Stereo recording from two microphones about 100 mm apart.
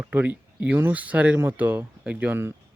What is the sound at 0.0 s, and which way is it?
Speech, 15° right (ahead or behind).